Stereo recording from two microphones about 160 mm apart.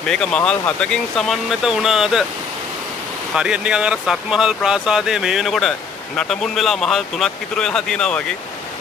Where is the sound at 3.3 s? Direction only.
5° right (ahead or behind).